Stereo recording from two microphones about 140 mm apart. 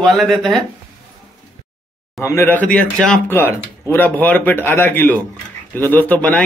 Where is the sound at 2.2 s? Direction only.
20° left (ahead or behind).